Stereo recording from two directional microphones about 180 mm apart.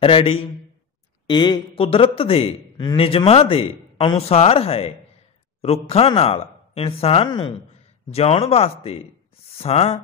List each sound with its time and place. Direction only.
0.0 s a man's voice: 30° left (ahead or behind)